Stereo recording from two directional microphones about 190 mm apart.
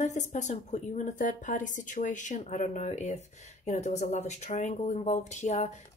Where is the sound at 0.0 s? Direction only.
40° left (ahead or behind).